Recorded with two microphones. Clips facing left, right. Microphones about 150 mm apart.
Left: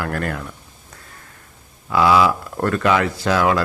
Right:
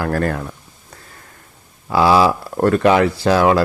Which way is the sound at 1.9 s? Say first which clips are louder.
Right 2 dB; 30° right (ahead or behind).